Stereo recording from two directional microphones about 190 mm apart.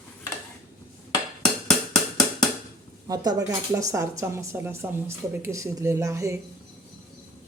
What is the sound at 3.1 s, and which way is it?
Speech, 20° right (ahead or behind).